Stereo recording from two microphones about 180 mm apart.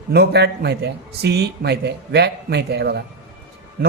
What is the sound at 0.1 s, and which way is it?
A man's voice, 65° right (ahead or behind).